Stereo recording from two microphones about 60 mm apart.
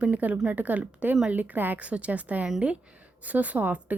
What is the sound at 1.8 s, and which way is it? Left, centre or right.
Speech, right.